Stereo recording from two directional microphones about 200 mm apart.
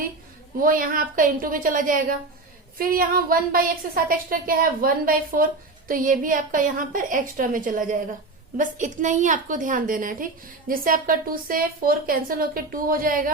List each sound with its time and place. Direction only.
0.6 s a woman's voice: 45° right (ahead or behind)